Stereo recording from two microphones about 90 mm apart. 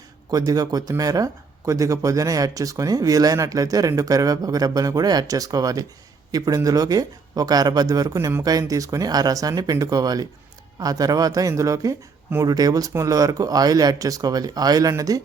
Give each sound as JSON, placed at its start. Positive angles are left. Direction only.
{"t": 0.3, "sound": "speech", "side_deg": -45}